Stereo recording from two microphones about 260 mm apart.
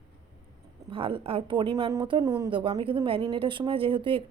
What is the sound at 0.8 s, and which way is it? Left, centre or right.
Speech, centre.